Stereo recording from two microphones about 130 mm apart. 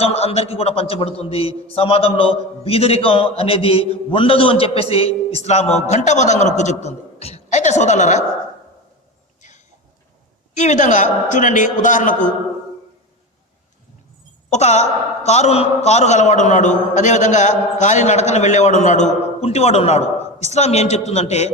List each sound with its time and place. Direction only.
0.0 s a man's voice: 50° left (ahead or behind)
6.8 s a woman's voice: 55° left (ahead or behind)
10.5 s a man's voice: 70° left (ahead or behind)
14.5 s a man's voice: 60° left (ahead or behind)